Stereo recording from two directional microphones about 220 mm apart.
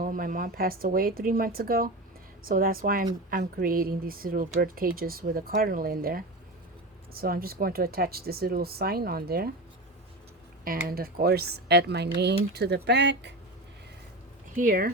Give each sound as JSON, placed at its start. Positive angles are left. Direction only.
{"t": 0.0, "sound": "speech", "side_deg": -40}
{"t": 10.8, "sound": "speech", "side_deg": -45}
{"t": 14.5, "sound": "speech", "side_deg": -40}